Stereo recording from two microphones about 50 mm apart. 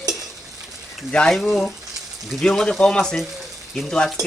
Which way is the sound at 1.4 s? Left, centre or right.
Centre.